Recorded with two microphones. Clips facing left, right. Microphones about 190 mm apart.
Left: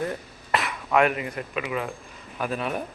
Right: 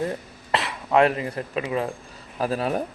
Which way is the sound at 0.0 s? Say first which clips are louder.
Right 2 dB; 25° right (ahead or behind).